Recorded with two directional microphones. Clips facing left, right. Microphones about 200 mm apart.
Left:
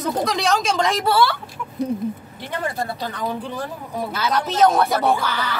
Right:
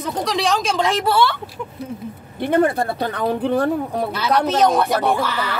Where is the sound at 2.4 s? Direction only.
55° right (ahead or behind).